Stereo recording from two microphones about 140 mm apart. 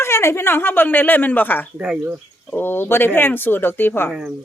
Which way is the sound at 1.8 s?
10° right (ahead or behind).